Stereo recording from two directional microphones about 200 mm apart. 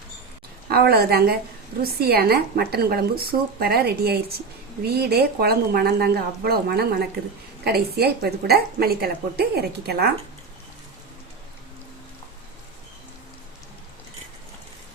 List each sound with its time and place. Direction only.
0.7 s a woman's voice: 50° right (ahead or behind)